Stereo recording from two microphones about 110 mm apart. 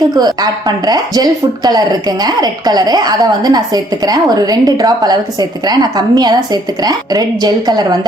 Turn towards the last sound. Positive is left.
turn(degrees=-40)  # may be behind; listen again after turning